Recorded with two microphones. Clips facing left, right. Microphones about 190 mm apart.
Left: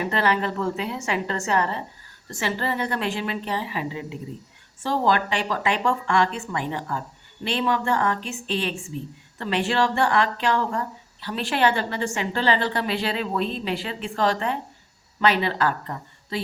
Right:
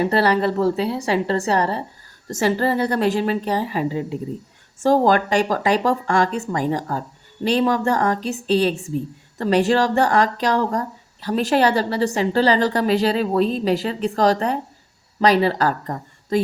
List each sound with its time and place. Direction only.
0.0 s speech: 35° right (ahead or behind)